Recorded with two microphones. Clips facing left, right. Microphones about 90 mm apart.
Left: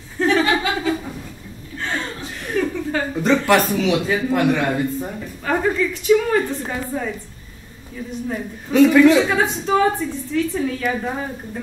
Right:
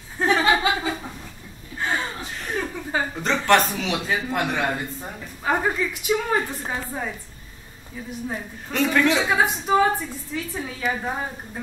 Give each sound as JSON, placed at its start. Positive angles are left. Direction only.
{"t": 0.2, "sound": "chuckle", "side_deg": -15}
{"t": 3.2, "sound": "a man's voice", "side_deg": 5}
{"t": 5.4, "sound": "a woman's voice", "side_deg": -15}
{"t": 8.7, "sound": "a man's voice", "side_deg": 5}